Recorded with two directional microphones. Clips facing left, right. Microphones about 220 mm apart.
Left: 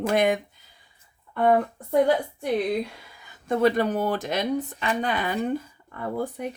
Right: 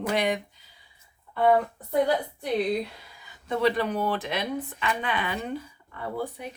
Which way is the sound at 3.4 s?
45° left (ahead or behind).